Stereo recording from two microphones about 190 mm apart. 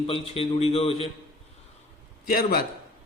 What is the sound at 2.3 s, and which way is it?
Speech, 50° left (ahead or behind).